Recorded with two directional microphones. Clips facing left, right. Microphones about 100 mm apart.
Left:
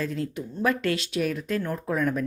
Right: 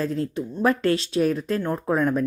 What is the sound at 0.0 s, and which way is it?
A woman's voice, 35° right (ahead or behind).